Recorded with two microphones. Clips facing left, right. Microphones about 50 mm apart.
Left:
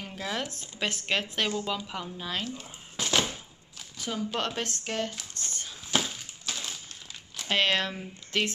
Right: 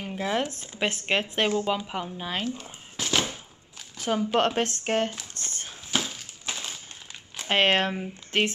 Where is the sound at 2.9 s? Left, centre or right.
Centre.